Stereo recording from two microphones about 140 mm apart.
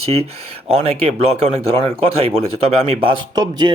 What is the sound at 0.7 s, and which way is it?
Speech, 45° right (ahead or behind).